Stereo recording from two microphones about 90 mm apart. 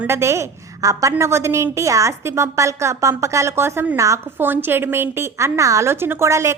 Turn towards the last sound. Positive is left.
turn(degrees=-30)  # may be behind; listen again after turning